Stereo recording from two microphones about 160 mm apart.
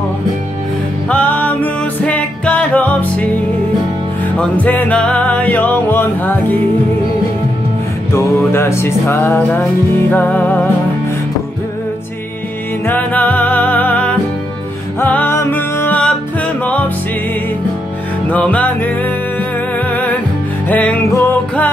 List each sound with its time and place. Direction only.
1.0 s music: 10° left (ahead or behind)
4.4 s music: 10° left (ahead or behind)
8.5 s music: 15° left (ahead or behind)
12.8 s music: 10° left (ahead or behind)
18.3 s music: 10° left (ahead or behind)
20.6 s music: 10° left (ahead or behind)